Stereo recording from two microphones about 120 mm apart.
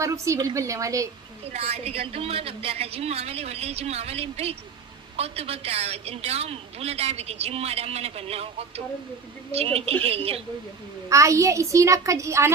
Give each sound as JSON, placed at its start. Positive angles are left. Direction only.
{"t": 0.0, "sound": "a child's voice", "side_deg": -25}
{"t": 1.5, "sound": "a woman's voice", "side_deg": -55}
{"t": 11.1, "sound": "a child's voice", "side_deg": -25}